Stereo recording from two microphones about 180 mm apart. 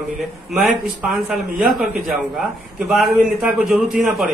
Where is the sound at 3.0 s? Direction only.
Centre (ahead or behind).